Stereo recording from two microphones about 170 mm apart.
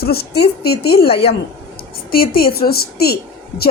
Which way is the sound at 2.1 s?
60° left (ahead or behind).